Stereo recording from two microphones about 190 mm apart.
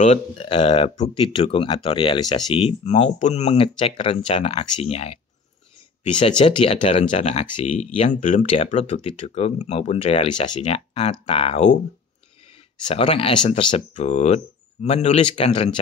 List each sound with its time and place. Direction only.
0.0 s speech: 30° left (ahead or behind)
12.8 s speech: 30° left (ahead or behind)